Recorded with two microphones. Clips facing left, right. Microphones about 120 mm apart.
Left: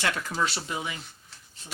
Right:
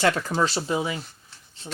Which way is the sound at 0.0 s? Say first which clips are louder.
Right 6 dB; 35° right (ahead or behind).